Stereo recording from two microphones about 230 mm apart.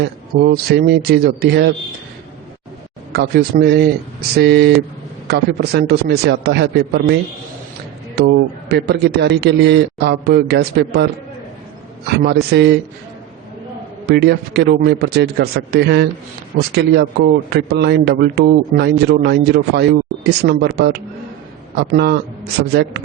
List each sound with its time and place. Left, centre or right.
0.0 s a man's voice: right
3.1 s a man's voice: right
12.2 s a man's voice: right
14.1 s a man's voice: right